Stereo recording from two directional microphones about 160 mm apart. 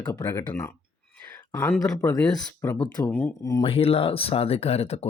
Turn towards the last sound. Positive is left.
turn(degrees=40)  # may be behind; listen again after turning